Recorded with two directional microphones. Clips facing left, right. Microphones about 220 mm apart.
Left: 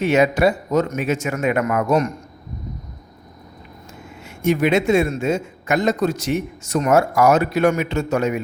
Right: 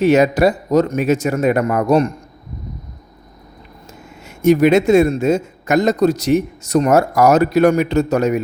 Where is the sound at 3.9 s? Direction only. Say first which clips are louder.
Even; 40° right (ahead or behind).